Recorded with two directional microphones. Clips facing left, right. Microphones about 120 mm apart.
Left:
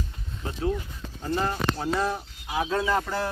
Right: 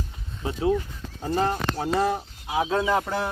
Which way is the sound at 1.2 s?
40° right (ahead or behind).